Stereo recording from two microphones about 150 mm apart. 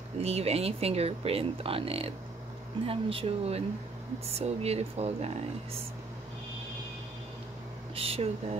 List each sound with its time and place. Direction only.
0.2 s speech: 45° right (ahead or behind)
7.9 s speech: 40° right (ahead or behind)